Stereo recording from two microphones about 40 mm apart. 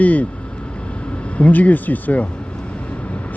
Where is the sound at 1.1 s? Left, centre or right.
Left.